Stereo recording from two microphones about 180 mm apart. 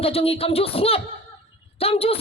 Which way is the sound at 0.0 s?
30° left (ahead or behind).